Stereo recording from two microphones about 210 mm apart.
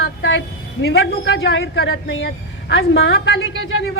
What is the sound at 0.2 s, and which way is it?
A woman's voice, 60° left (ahead or behind).